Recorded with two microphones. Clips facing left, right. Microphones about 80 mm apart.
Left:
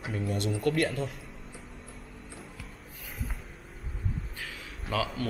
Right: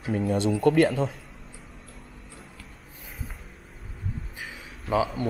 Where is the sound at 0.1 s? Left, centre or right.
Right.